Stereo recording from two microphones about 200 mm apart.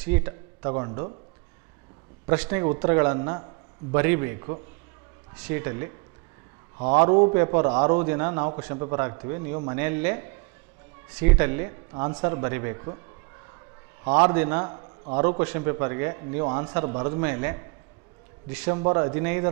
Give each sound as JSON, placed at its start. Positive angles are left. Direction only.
{"t": 0.0, "sound": "a sound", "side_deg": -15}
{"t": 0.7, "sound": "a man's voice", "side_deg": -25}
{"t": 2.3, "sound": "a man's voice", "side_deg": -10}
{"t": 6.8, "sound": "a man's voice", "side_deg": -40}
{"t": 7.3, "sound": "a man's voice", "side_deg": -20}
{"t": 11.9, "sound": "a man's voice", "side_deg": -25}
{"t": 12.2, "sound": "a man's voice", "side_deg": -15}
{"t": 14.3, "sound": "a man's voice", "side_deg": -15}
{"t": 18.8, "sound": "a man's voice", "side_deg": -25}